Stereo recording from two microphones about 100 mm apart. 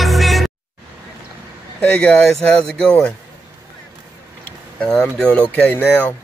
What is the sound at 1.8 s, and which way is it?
Speech, 10° left (ahead or behind).